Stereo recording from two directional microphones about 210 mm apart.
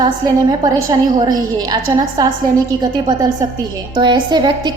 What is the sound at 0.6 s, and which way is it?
A woman's voice, 20° right (ahead or behind).